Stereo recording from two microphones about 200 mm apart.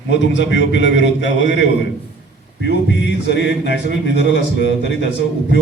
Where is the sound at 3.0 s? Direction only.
60° left (ahead or behind).